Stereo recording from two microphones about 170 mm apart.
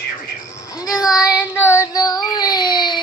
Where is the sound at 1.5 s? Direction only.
15° left (ahead or behind).